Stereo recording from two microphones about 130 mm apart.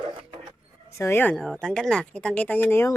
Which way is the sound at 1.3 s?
5° left (ahead or behind).